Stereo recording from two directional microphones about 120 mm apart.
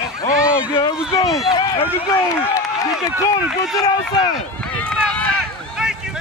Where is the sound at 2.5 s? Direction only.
30° left (ahead or behind).